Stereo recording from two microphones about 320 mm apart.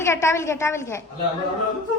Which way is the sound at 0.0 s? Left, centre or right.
Centre.